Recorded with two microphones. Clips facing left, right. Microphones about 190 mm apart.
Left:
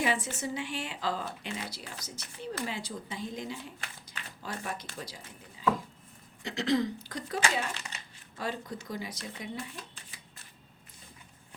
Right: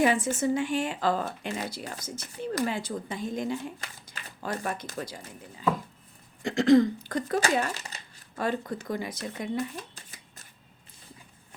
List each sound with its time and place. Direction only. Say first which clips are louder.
0.0 s speech: right 7 dB; 50° right (ahead or behind)
6.4 s speech: right 9 dB; 50° right (ahead or behind)